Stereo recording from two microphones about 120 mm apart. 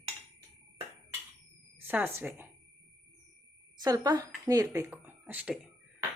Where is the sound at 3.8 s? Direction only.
30° right (ahead or behind).